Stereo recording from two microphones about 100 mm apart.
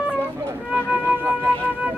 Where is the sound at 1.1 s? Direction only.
20° right (ahead or behind).